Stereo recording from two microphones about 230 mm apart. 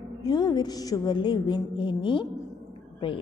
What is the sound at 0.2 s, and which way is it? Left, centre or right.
A woman's voice, centre.